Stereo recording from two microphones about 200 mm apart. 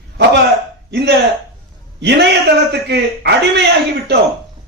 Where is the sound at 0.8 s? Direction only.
60° right (ahead or behind).